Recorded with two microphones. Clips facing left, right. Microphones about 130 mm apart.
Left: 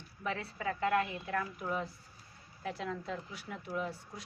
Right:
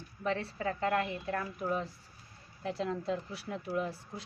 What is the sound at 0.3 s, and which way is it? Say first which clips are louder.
A woman's voice: right 3 dB; 35° right (ahead or behind).